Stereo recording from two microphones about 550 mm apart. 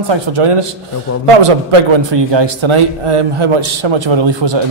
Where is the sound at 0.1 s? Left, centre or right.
Right.